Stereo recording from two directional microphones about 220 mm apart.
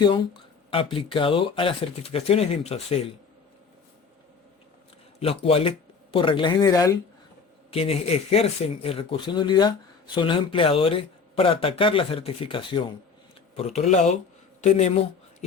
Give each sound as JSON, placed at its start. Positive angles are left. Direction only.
{"t": 0.0, "sound": "speech", "side_deg": 25}
{"t": 5.2, "sound": "speech", "side_deg": 25}
{"t": 7.7, "sound": "speech", "side_deg": 25}